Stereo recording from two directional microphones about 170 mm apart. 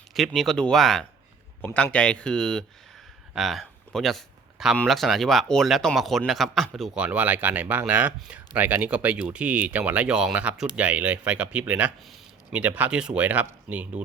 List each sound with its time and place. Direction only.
0.1 s speech: centre (ahead or behind)